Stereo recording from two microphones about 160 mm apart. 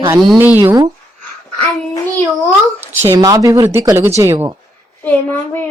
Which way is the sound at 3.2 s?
20° right (ahead or behind).